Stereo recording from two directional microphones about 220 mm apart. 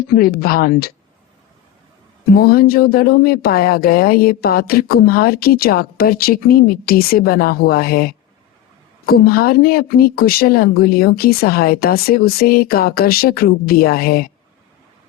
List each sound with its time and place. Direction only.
0.0 s speech: 45° left (ahead or behind)
2.3 s speech: 45° left (ahead or behind)